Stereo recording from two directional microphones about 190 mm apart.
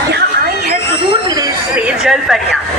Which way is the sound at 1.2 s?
20° right (ahead or behind).